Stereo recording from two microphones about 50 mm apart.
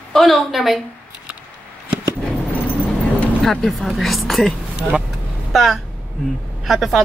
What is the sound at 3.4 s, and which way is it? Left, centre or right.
A woman's voice, centre.